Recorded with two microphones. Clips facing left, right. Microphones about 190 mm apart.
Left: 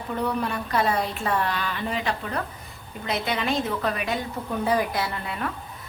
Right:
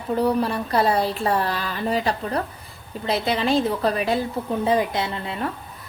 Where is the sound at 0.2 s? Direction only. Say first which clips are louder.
Right 5 dB; 35° right (ahead or behind).